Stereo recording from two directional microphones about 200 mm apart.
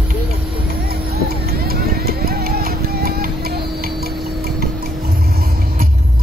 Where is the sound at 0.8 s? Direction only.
50° right (ahead or behind).